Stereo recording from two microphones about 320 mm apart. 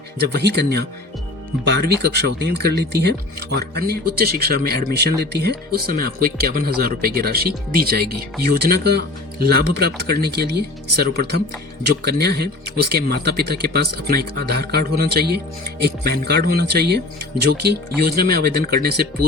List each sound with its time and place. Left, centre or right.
0.2 s speech: right